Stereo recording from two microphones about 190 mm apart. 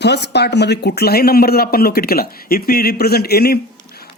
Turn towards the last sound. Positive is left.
turn(degrees=55)  # may be behind; listen again after turning